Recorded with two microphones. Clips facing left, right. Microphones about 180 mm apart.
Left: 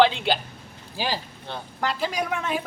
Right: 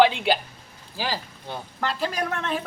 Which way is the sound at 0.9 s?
15° left (ahead or behind).